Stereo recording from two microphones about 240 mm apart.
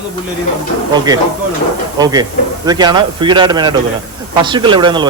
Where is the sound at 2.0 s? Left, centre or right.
Centre.